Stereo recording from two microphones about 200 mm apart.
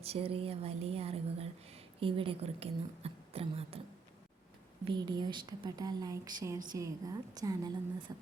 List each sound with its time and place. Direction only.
0.0 s speech: 30° right (ahead or behind)
4.9 s a woman's voice: 20° right (ahead or behind)